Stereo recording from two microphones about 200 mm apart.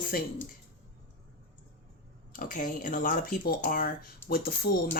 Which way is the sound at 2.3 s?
45° left (ahead or behind).